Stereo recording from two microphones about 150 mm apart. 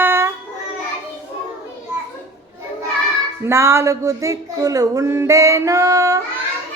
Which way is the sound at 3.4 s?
15° right (ahead or behind).